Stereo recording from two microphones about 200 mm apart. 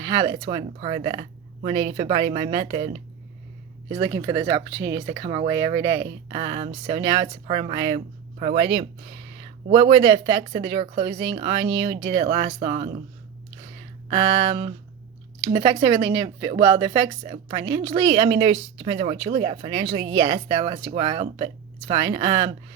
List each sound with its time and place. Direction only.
0.0 s speech: 25° right (ahead or behind)
8.7 s a sound: 30° right (ahead or behind)
9.9 s speech: 25° right (ahead or behind)
14.1 s speech: 25° right (ahead or behind)